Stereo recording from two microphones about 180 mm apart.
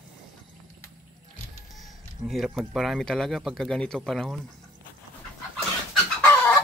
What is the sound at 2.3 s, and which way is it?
Speech, centre (ahead or behind).